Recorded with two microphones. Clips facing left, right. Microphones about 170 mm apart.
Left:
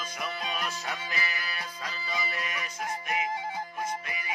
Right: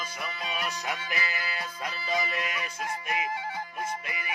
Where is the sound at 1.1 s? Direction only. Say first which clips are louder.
Right 2 dB; 20° right (ahead or behind).